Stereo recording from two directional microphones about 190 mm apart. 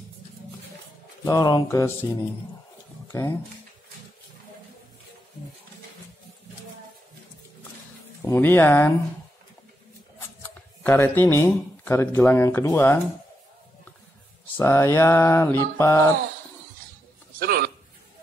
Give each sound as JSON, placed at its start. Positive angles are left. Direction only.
{"t": 1.2, "sound": "speech", "side_deg": 20}
{"t": 8.3, "sound": "speech", "side_deg": 10}
{"t": 10.8, "sound": "speech", "side_deg": 10}
{"t": 14.6, "sound": "speech", "side_deg": 10}
{"t": 17.4, "sound": "a sound", "side_deg": -50}